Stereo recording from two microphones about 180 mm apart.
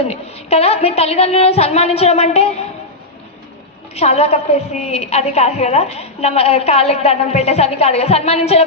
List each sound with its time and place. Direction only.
0.0 s a woman's voice: 35° left (ahead or behind)
3.9 s a woman's voice: 35° left (ahead or behind)